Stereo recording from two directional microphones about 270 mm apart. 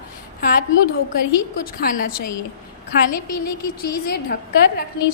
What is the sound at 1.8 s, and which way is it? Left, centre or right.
Speech, left.